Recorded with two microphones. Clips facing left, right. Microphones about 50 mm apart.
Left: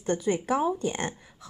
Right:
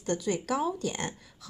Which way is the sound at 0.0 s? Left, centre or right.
Left.